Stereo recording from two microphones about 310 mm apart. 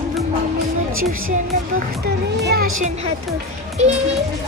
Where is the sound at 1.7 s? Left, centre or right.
Right.